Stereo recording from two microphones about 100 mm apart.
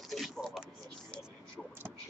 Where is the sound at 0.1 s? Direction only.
Centre (ahead or behind).